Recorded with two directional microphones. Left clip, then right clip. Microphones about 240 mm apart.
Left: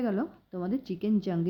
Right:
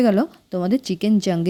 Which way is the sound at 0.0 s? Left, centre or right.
Right.